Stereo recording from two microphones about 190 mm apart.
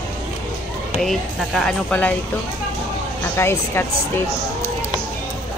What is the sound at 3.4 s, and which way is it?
Speech, 15° left (ahead or behind).